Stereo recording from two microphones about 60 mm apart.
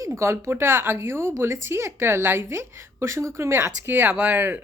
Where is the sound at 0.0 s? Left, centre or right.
Right.